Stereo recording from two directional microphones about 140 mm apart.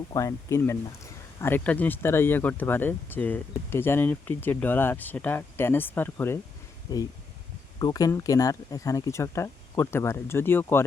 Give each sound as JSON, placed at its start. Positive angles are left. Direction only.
{"t": 0.1, "sound": "speech", "side_deg": 25}